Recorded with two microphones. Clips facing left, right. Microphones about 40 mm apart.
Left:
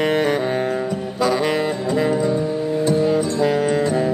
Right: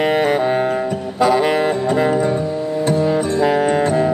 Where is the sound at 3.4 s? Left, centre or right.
Centre.